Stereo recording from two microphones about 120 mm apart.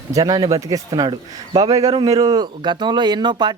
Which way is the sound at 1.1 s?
45° right (ahead or behind).